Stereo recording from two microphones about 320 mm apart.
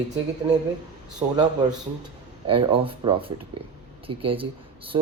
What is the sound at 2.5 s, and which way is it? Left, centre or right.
Speech, centre.